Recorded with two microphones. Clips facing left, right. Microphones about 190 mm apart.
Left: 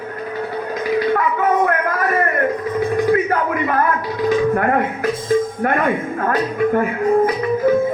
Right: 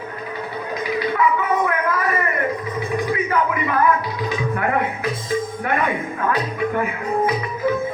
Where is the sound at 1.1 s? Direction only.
50° left (ahead or behind).